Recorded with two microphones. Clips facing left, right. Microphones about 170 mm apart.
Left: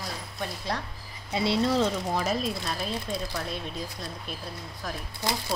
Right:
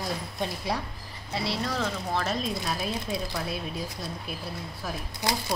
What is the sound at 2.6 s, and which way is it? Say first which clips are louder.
Speech: right 1 dB; 5° right (ahead or behind).